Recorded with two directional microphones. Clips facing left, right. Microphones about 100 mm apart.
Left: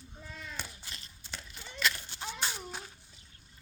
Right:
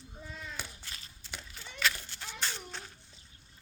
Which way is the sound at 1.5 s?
15° left (ahead or behind).